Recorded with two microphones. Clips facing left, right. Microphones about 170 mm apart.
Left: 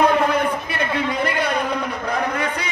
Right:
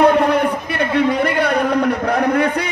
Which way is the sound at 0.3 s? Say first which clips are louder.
Right 4 dB; 60° right (ahead or behind).